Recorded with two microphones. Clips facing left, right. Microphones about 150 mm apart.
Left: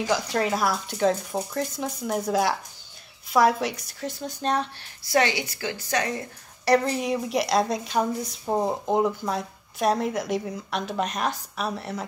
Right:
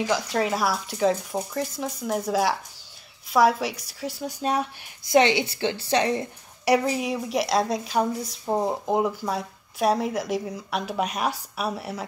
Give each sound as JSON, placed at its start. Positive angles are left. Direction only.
{"t": 0.0, "sound": "speech", "side_deg": 0}
{"t": 5.0, "sound": "a woman's voice", "side_deg": -20}
{"t": 6.6, "sound": "speech", "side_deg": -10}